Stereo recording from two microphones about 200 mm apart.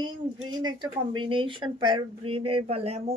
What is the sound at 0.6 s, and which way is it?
A woman's voice, 25° right (ahead or behind).